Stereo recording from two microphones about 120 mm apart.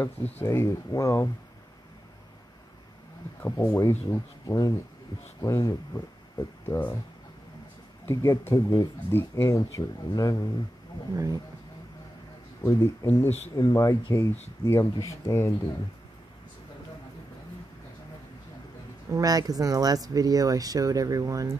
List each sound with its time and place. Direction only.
0.0 s speech: 15° left (ahead or behind)
3.4 s speech: 25° left (ahead or behind)
8.0 s speech: 25° left (ahead or behind)
11.1 s speech: 30° right (ahead or behind)
12.6 s speech: 25° left (ahead or behind)
19.1 s speech: 30° right (ahead or behind)